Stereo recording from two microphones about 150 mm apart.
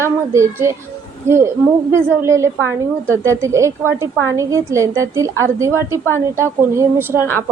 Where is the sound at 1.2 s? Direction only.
20° right (ahead or behind).